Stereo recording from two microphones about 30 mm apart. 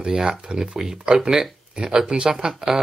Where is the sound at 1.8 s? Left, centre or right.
Right.